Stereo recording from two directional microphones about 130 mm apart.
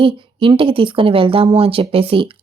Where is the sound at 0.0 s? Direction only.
40° right (ahead or behind).